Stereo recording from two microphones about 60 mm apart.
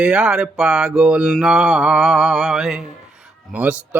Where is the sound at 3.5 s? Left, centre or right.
Right.